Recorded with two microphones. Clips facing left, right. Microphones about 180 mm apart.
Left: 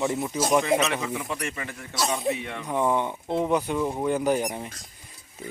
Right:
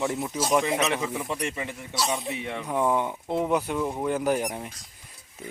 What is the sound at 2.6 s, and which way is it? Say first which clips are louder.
Speech: right 1 dB; 5° right (ahead or behind).